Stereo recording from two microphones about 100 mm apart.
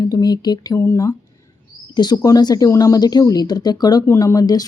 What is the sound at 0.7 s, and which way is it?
Speech, 30° left (ahead or behind).